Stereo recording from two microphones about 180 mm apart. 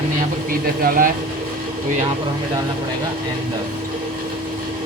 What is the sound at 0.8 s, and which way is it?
Speech, 50° right (ahead or behind).